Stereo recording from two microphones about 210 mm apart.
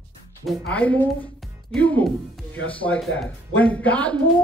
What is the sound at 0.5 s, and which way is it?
A man's voice, 5° left (ahead or behind).